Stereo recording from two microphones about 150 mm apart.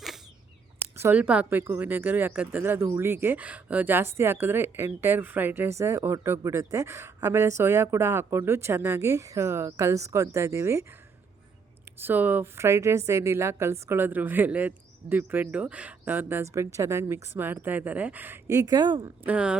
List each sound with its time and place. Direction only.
0.9 s speech: 15° right (ahead or behind)
11.9 s speech: 10° right (ahead or behind); by 19.1 s 30° right (ahead or behind)
19.2 s speech: 10° right (ahead or behind)